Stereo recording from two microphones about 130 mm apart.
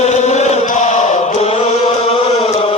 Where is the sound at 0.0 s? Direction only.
60° left (ahead or behind).